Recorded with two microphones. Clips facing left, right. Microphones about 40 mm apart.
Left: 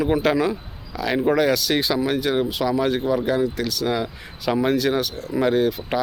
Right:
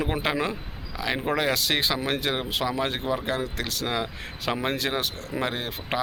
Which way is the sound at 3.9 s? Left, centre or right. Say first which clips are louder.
Left 4 dB; right.